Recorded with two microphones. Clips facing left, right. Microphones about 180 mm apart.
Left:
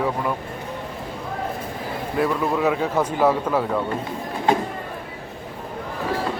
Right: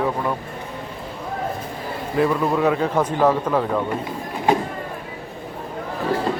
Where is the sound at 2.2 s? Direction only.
Centre (ahead or behind).